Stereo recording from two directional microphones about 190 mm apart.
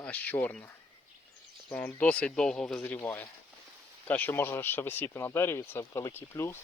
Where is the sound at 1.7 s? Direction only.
10° left (ahead or behind).